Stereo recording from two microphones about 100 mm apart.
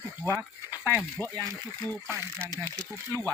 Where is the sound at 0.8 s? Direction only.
25° left (ahead or behind).